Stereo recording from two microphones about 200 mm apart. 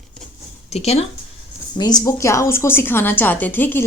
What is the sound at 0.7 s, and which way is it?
Speech, 30° left (ahead or behind).